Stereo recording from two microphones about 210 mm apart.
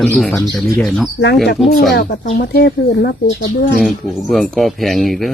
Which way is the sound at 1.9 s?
50° left (ahead or behind).